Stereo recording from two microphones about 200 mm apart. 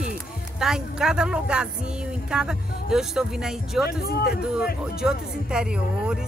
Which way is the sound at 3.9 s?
50° left (ahead or behind).